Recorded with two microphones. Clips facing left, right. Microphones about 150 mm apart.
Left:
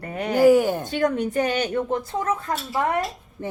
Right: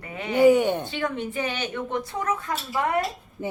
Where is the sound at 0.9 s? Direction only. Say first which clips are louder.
Left 6 dB; 45° left (ahead or behind).